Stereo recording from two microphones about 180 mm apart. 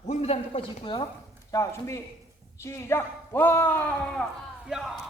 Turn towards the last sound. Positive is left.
turn(degrees=0)  # may be behind; listen again after turning